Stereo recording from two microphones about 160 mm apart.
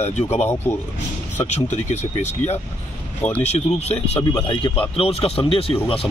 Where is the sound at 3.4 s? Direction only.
40° left (ahead or behind).